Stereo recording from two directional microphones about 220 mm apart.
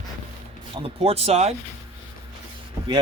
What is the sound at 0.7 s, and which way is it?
Speech, 25° right (ahead or behind).